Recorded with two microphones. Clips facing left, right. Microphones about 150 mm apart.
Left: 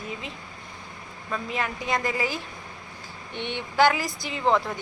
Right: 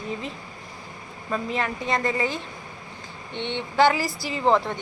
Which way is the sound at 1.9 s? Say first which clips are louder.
Right 2 dB; centre (ahead or behind).